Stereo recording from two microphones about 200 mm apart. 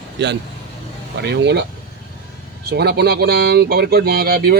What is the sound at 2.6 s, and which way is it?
Speech, 55° right (ahead or behind).